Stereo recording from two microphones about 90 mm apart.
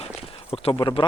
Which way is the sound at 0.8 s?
60° left (ahead or behind).